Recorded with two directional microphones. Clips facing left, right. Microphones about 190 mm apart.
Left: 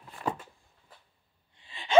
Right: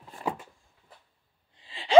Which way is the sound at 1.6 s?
30° right (ahead or behind).